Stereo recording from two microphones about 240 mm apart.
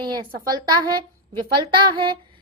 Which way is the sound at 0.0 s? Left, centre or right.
Centre.